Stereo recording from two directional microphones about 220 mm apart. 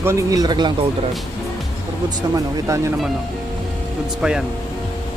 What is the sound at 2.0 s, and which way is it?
Speech, 15° right (ahead or behind).